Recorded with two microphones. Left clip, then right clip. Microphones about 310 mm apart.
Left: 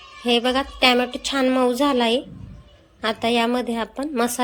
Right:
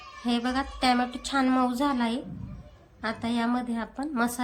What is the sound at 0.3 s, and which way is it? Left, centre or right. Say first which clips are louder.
A woman's voice: left 9 dB; centre.